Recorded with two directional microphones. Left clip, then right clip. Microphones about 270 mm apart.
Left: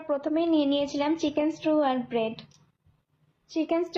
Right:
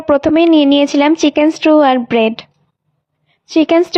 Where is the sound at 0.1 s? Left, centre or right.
Right.